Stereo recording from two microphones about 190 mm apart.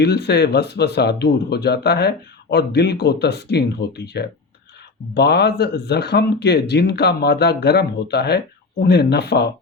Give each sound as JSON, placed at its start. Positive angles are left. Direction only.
{"t": 0.0, "sound": "speech", "side_deg": 60}